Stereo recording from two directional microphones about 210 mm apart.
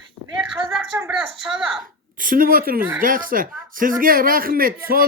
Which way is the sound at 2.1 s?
40° right (ahead or behind).